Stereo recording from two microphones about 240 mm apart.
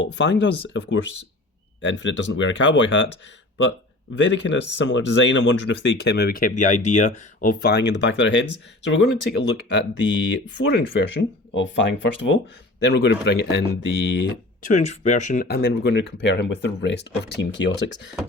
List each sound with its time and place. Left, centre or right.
0.0 s speech: left
4.2 s speech: left
14.6 s speech: left